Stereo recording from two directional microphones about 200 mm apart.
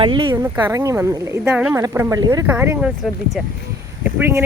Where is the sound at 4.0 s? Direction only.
10° right (ahead or behind).